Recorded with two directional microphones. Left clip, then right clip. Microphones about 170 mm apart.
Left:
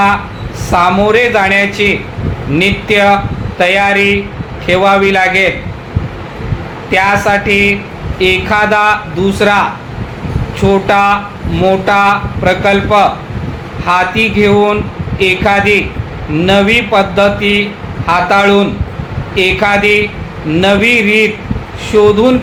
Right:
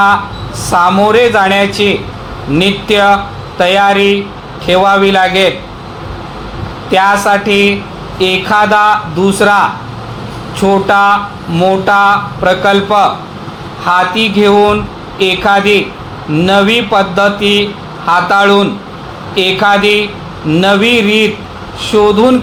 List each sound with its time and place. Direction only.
0.7 s a man's voice: 20° right (ahead or behind)
6.9 s a man's voice: 20° right (ahead or behind)
10.6 s a man's voice: 20° right (ahead or behind)